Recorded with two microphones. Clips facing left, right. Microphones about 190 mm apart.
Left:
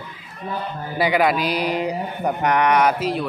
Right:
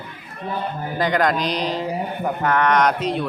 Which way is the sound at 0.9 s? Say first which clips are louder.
Left 1 dB; 10° left (ahead or behind).